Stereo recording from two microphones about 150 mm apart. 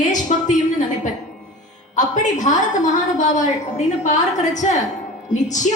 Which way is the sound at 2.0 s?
55° left (ahead or behind).